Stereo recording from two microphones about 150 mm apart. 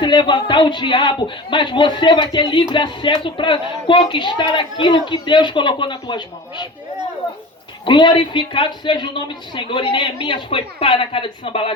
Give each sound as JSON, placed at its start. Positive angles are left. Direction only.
{"t": 0.0, "sound": "speech", "side_deg": 30}
{"t": 7.9, "sound": "speech", "side_deg": 30}